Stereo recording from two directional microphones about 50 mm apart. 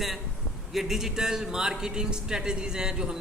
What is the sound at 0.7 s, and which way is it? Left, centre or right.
A man's voice, centre.